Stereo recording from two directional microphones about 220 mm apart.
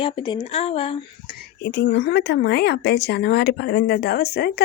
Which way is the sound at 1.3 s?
50° left (ahead or behind).